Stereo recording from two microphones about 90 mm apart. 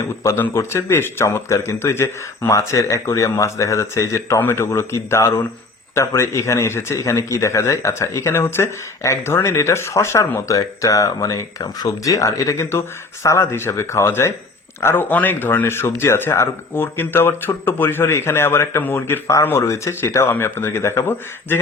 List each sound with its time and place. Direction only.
0.0 s speech: 30° left (ahead or behind)